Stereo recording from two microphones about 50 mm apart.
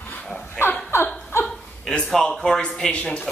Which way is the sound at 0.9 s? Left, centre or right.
Left.